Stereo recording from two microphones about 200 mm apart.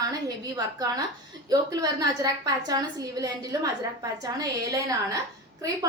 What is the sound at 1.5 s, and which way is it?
A woman's voice, 20° right (ahead or behind).